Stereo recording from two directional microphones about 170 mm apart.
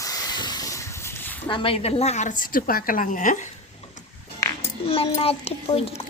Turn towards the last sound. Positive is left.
turn(degrees=35)  # may be behind; listen again after turning